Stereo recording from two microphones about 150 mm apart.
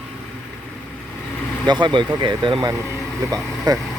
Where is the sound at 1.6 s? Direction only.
30° right (ahead or behind).